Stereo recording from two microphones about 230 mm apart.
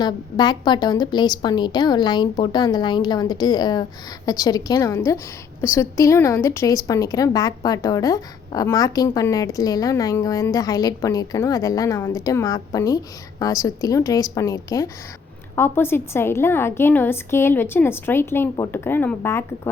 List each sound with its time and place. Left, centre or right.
0.0 s a woman's voice: centre